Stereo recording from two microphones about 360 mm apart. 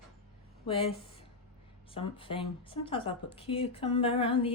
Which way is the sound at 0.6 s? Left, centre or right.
Centre.